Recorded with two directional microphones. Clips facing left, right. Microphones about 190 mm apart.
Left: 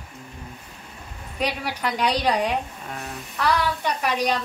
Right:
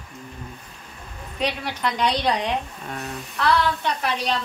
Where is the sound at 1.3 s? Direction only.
10° left (ahead or behind).